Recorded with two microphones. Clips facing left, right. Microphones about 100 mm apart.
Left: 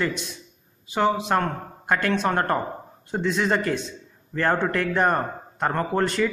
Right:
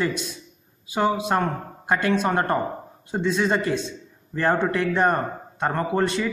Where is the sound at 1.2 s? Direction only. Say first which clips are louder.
Even; 10° right (ahead or behind).